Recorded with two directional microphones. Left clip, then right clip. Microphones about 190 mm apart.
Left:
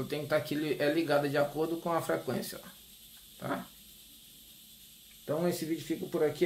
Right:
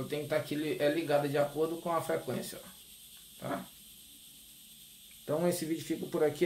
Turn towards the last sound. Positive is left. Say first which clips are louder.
# even
turn(degrees=-5)  # may be behind; listen again after turning